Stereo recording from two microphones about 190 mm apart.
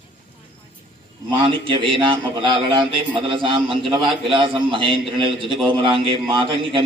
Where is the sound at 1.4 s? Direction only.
25° right (ahead or behind).